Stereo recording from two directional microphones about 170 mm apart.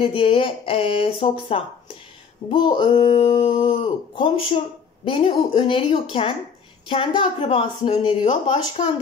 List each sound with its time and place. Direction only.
0.0 s speech: 35° left (ahead or behind)
8.8 s speech: 40° left (ahead or behind)